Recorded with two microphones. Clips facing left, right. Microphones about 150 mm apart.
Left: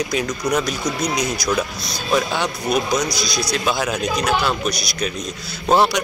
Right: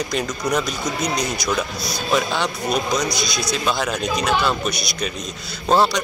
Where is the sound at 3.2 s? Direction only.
50° right (ahead or behind).